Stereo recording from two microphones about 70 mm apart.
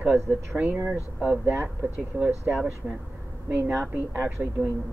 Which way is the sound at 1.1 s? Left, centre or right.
Centre.